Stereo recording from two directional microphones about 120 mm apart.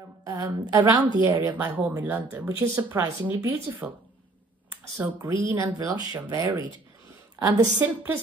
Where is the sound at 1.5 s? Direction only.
15° right (ahead or behind).